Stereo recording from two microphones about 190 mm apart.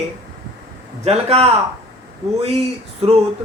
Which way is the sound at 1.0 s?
30° right (ahead or behind).